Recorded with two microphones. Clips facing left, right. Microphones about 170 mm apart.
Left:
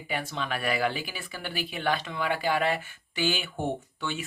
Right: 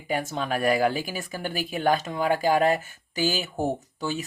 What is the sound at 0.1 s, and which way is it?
Speech, 45° right (ahead or behind).